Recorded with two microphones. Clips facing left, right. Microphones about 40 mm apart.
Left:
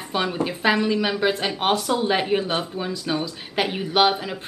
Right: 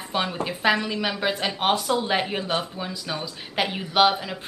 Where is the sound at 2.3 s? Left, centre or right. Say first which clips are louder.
Left 4 dB; centre.